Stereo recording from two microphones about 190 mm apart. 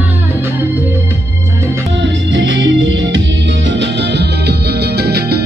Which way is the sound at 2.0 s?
70° right (ahead or behind).